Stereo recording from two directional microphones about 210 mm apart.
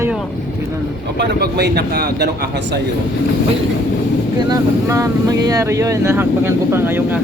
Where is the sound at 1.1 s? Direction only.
50° right (ahead or behind).